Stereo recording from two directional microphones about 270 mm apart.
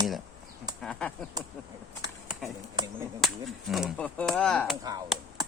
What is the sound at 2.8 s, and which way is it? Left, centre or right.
Speech, centre.